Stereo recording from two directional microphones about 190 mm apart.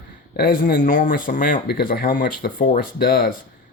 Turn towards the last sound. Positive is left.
turn(degrees=50)  # may be behind; listen again after turning